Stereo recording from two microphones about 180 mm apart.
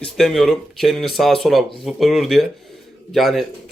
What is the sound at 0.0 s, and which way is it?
Speech, centre (ahead or behind).